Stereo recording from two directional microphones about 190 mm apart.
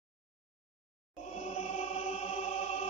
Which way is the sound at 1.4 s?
35° left (ahead or behind).